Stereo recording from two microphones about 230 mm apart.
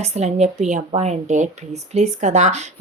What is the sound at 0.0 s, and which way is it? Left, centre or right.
Speech, right.